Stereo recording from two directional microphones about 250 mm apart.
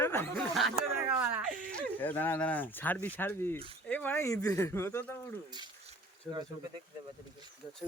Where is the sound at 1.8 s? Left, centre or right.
Centre.